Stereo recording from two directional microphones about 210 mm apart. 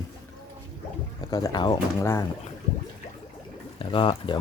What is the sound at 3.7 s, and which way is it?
Speech, 25° left (ahead or behind).